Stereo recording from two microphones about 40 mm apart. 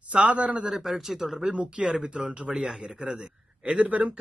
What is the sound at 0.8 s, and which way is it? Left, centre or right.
Speech, centre.